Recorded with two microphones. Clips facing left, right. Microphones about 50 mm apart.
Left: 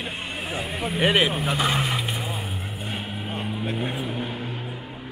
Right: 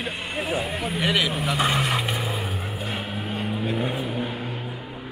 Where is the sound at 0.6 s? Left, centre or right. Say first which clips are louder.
Right 1 dB; centre.